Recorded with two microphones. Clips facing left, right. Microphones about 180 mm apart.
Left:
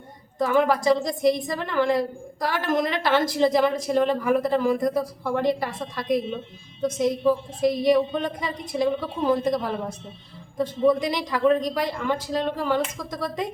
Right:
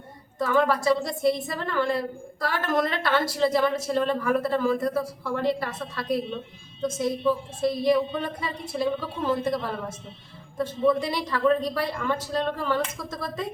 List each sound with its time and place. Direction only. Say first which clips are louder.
0.3 s a woman's voice: left 2 dB; 15° left (ahead or behind)